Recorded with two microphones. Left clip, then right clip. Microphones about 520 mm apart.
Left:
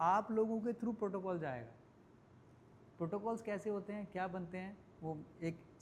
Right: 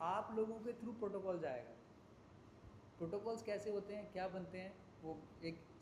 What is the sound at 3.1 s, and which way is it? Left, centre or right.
A man's voice, left.